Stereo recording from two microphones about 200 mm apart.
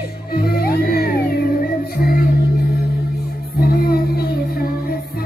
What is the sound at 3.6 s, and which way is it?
Music, 50° left (ahead or behind).